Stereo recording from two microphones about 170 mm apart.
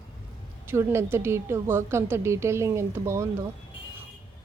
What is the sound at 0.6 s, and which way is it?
A woman's voice, 15° right (ahead or behind).